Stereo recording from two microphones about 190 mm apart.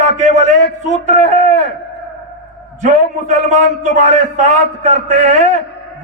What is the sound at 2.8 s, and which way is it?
A man's voice, 40° right (ahead or behind).